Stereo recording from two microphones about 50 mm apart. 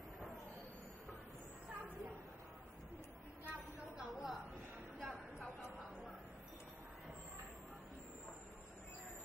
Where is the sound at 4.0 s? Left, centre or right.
Centre.